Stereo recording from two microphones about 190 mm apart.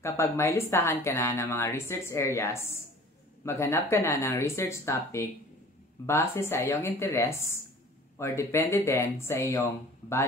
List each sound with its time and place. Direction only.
0.0 s speech: 15° left (ahead or behind)